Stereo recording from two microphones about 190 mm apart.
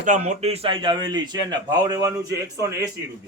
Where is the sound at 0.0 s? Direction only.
40° right (ahead or behind); by 2.6 s 20° right (ahead or behind).